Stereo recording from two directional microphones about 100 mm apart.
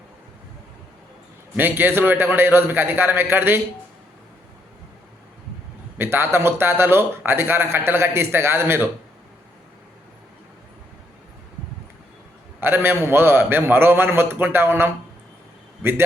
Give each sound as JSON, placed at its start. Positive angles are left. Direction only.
{"t": 1.5, "sound": "a man's voice", "side_deg": -20}
{"t": 6.0, "sound": "a man's voice", "side_deg": -25}
{"t": 12.5, "sound": "a man's voice", "side_deg": -20}